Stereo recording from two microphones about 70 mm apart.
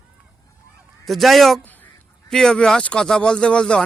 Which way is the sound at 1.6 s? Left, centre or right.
Left.